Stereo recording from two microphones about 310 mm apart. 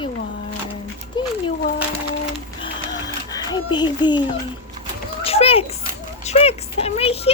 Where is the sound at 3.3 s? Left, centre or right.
Centre.